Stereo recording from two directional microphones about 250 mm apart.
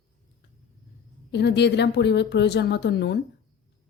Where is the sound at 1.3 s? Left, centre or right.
Left.